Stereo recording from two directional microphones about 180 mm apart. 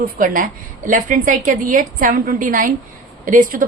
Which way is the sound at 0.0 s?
50° right (ahead or behind).